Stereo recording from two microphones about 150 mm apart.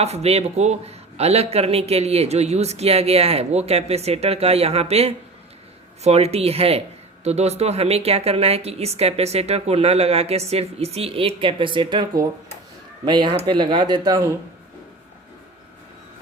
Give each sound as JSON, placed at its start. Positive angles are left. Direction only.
{"t": 0.0, "sound": "speech", "side_deg": -45}